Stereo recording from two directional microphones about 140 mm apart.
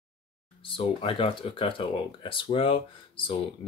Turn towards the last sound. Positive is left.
turn(degrees=40)  # may be behind; listen again after turning